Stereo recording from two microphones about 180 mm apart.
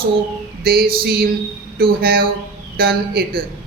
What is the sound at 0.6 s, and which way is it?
Speech, 60° right (ahead or behind).